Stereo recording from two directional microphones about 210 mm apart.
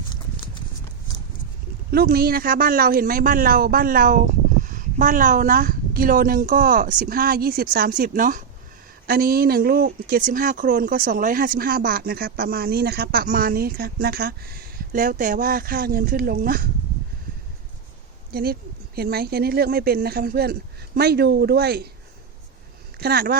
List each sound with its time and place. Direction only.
1.9 s speech: 45° right (ahead or behind)
18.3 s speech: 45° right (ahead or behind)
23.0 s speech: 50° right (ahead or behind)